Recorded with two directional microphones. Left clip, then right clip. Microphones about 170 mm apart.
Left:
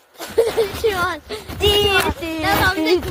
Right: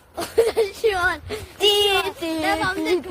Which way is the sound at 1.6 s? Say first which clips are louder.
Left 2 dB; 25° right (ahead or behind).